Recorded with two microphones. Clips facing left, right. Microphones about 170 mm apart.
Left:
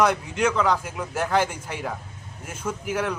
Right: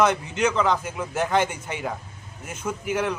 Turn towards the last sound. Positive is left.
turn(degrees=-5)  # may be behind; listen again after turning